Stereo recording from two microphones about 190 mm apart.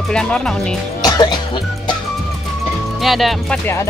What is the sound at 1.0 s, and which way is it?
Music, 20° left (ahead or behind).